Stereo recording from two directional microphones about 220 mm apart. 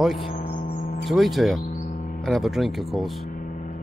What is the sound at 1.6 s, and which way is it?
Music, 35° left (ahead or behind).